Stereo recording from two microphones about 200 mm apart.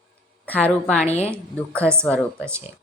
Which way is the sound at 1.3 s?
5° left (ahead or behind).